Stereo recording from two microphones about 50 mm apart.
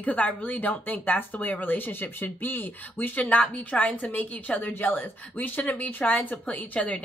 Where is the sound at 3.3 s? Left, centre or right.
Left.